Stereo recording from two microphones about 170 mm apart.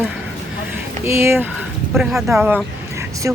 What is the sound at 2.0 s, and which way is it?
A woman's voice, centre (ahead or behind).